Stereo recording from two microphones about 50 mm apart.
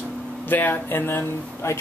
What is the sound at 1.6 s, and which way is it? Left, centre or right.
Speech, left.